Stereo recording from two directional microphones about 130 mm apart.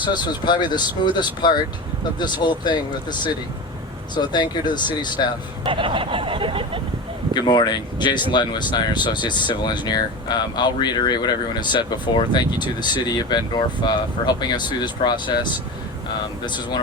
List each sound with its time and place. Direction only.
0.0 s speech: 35° left (ahead or behind)
5.6 s a sound: 40° right (ahead or behind)
7.3 s speech: 35° left (ahead or behind)
16.5 s speech: 35° left (ahead or behind)